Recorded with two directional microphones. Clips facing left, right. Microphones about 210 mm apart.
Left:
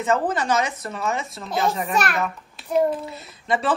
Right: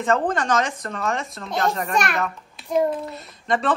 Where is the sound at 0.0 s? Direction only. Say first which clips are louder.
Right 1 dB; 5° left (ahead or behind).